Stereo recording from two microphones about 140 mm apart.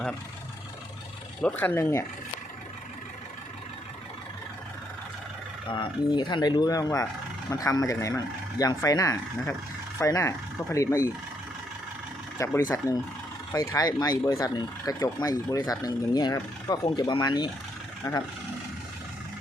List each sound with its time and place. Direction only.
1.4 s speech: 10° left (ahead or behind)
5.6 s speech: 35° left (ahead or behind); by 11.1 s 20° left (ahead or behind)
12.4 s speech: 20° left (ahead or behind)